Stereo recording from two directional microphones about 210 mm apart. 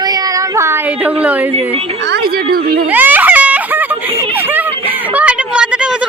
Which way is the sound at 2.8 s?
10° right (ahead or behind).